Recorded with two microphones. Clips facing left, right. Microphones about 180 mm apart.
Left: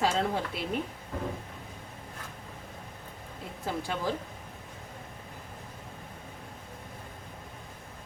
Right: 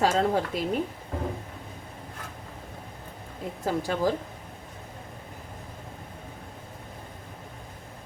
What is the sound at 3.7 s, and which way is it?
Speech, 40° right (ahead or behind).